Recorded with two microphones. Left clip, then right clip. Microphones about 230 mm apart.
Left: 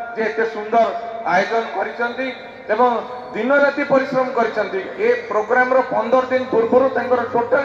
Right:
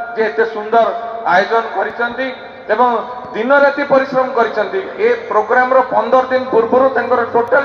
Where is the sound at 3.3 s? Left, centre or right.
Left.